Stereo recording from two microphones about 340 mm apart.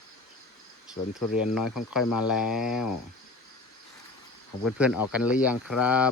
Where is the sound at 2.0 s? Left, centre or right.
Left.